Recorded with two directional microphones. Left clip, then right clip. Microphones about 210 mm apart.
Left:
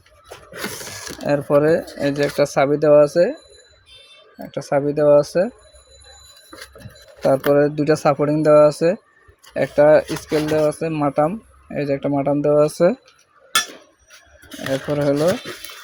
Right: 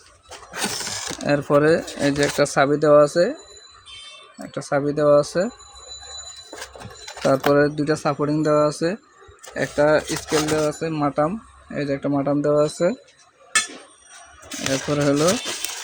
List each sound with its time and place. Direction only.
0.9 s speech: 15° right (ahead or behind); by 3.3 s centre (ahead or behind)
4.5 s speech: 5° left (ahead or behind)
7.2 s speech: centre (ahead or behind)
7.9 s speech: 20° left (ahead or behind)
14.6 s speech: 5° right (ahead or behind)